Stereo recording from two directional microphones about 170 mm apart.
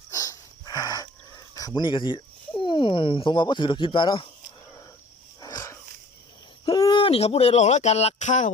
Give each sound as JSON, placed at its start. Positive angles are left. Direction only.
{"t": 0.1, "sound": "wheeze", "side_deg": 20}
{"t": 1.5, "sound": "speech", "side_deg": 25}
{"t": 5.4, "sound": "dog", "side_deg": 20}
{"t": 6.7, "sound": "speech", "side_deg": 25}